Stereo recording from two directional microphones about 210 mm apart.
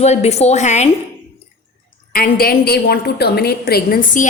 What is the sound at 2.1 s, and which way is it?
A woman's voice, 45° left (ahead or behind).